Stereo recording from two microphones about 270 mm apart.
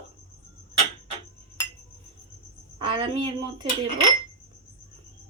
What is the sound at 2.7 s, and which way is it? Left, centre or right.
Speech, centre.